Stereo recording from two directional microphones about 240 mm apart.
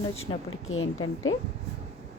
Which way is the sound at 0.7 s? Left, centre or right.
Left.